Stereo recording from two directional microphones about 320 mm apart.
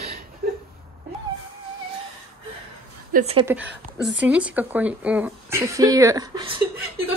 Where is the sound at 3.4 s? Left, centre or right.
Centre.